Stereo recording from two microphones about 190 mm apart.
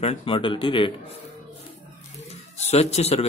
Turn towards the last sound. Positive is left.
turn(degrees=35)  # may be behind; listen again after turning